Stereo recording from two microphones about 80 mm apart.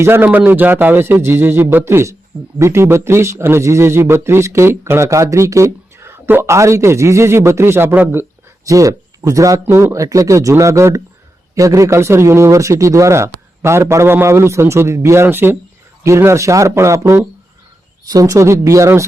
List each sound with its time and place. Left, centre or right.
0.0 s a man's voice: right
8.6 s speech: right